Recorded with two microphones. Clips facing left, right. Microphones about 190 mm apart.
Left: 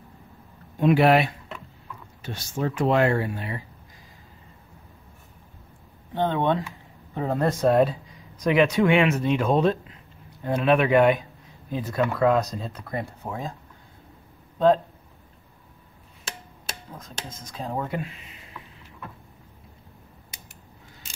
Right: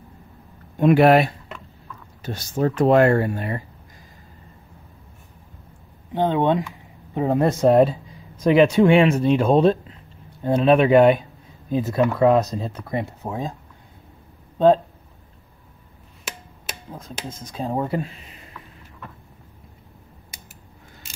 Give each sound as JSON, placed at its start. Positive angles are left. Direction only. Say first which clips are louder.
{"t": 0.7, "sound": "speech", "louder": "right 4 dB", "side_deg": -50}
{"t": 6.1, "sound": "speech", "louder": "right 4 dB", "side_deg": -15}
{"t": 17.5, "sound": "speech", "louder": "right 5 dB", "side_deg": -30}